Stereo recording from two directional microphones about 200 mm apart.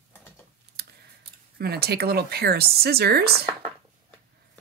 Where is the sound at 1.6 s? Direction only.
50° right (ahead or behind).